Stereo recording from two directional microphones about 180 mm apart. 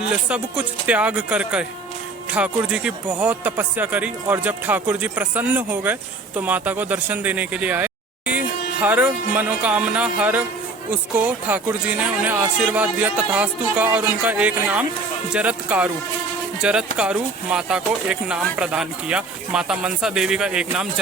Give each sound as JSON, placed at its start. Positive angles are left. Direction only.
{"t": 0.1, "sound": "speech", "side_deg": -5}